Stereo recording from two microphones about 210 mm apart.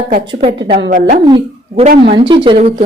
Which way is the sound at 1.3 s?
25° right (ahead or behind).